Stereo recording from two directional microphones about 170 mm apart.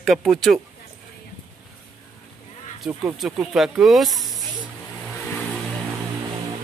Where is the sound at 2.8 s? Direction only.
10° right (ahead or behind).